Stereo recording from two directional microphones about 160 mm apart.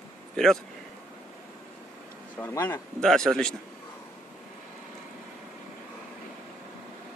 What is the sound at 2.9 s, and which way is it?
Speech, 5° left (ahead or behind).